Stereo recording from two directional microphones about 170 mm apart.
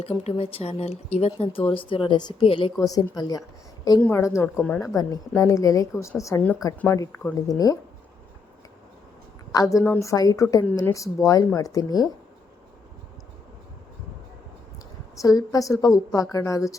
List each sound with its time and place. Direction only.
0.0 s a woman's voice: 35° left (ahead or behind)
2.9 s a woman's voice: 20° left (ahead or behind)
4.9 s a woman's voice: 20° left (ahead or behind)
9.5 s a woman's voice: 20° left (ahead or behind)
15.2 s a woman's voice: 20° left (ahead or behind)